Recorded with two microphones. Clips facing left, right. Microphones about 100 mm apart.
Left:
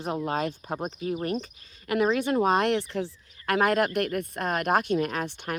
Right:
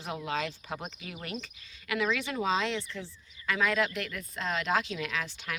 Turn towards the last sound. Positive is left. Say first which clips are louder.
# left 5 dB
turn(degrees=45)  # may be behind; listen again after turning